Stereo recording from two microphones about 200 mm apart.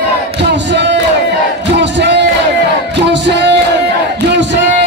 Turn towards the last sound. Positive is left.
turn(degrees=-60)  # may be behind; listen again after turning